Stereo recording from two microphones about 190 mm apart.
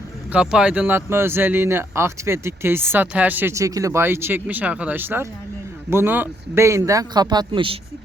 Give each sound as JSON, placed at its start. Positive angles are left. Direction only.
{"t": 0.3, "sound": "speech", "side_deg": -5}